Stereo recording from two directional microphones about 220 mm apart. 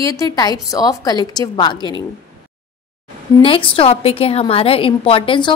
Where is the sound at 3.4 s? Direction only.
25° left (ahead or behind).